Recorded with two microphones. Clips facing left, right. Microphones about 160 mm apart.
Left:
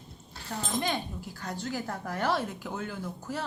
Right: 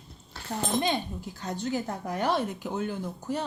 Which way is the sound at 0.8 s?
20° right (ahead or behind).